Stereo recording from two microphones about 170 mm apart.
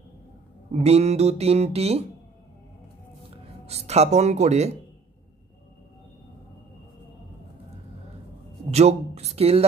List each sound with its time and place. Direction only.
0.7 s speech: 35° right (ahead or behind)
3.6 s speech: 40° right (ahead or behind)
8.6 s speech: 40° right (ahead or behind)